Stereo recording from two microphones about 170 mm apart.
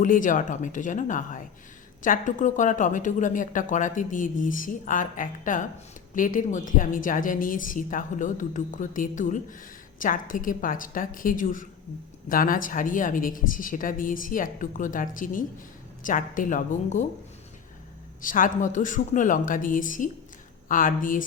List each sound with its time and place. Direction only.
0.0 s speech: 50° left (ahead or behind)
18.2 s speech: 50° left (ahead or behind)